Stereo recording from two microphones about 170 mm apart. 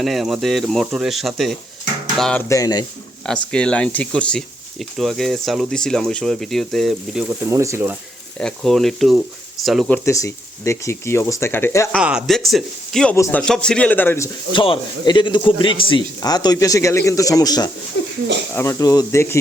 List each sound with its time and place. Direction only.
0.0 s speech: centre (ahead or behind)
2.1 s a sound: 5° left (ahead or behind)
2.5 s speech: 20° left (ahead or behind)
3.2 s speech: 5° left (ahead or behind)
7.3 s speech: 15° right (ahead or behind)
8.4 s speech: 5° left (ahead or behind)
10.1 s speech: 15° left (ahead or behind)
11.9 s speech: 5° right (ahead or behind)
13.1 s speech: 15° left (ahead or behind)
13.4 s speech: 5° left (ahead or behind)
14.5 s speech: 30° left (ahead or behind)